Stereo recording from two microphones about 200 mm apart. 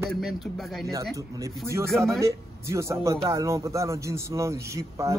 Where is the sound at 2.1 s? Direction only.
15° right (ahead or behind).